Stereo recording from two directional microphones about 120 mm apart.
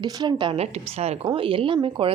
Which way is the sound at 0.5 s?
60° right (ahead or behind).